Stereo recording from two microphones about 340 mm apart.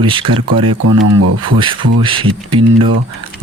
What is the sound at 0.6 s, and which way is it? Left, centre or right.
Speech, right.